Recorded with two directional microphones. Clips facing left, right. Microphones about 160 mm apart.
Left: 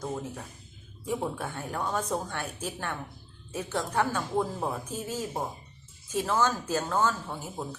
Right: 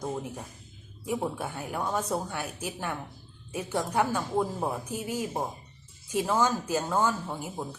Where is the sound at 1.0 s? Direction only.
10° right (ahead or behind).